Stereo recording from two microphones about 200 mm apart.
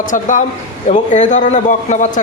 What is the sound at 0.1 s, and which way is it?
A man's voice, 40° left (ahead or behind).